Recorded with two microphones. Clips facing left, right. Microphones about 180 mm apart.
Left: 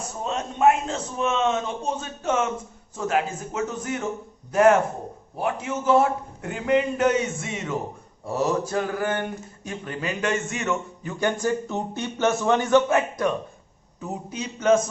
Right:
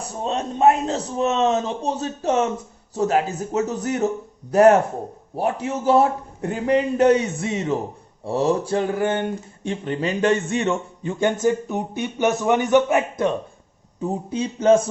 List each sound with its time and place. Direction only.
0.2 s a man's voice: 35° right (ahead or behind)